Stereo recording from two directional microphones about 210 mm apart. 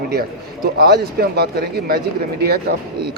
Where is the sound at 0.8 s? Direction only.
50° right (ahead or behind).